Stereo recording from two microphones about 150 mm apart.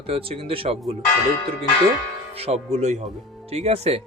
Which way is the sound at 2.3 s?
45° right (ahead or behind).